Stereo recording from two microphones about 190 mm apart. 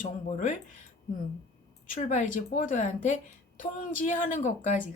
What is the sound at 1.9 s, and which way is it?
A woman's voice, 45° left (ahead or behind).